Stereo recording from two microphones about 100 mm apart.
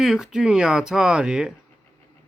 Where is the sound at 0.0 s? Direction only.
5° right (ahead or behind).